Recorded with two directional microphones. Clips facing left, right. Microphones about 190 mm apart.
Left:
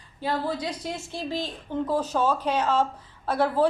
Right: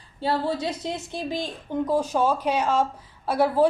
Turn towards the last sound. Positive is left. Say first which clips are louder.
# right 2 dB
turn(degrees=-10)  # may be behind; listen again after turning